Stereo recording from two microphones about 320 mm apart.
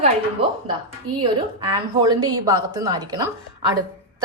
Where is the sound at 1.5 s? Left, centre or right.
Centre.